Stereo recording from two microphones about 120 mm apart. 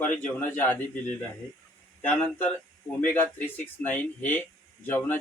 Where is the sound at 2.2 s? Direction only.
10° left (ahead or behind).